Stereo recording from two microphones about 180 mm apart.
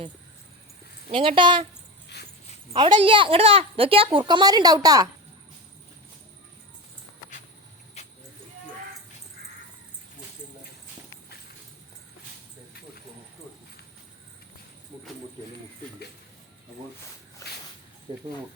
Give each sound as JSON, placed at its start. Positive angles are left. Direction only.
{"t": 1.0, "sound": "a woman's voice", "side_deg": -30}
{"t": 2.1, "sound": "dog", "side_deg": 70}
{"t": 2.8, "sound": "a woman's voice", "side_deg": -35}
{"t": 8.0, "sound": "vehicle", "side_deg": 40}
{"t": 18.1, "sound": "a woman's voice", "side_deg": -30}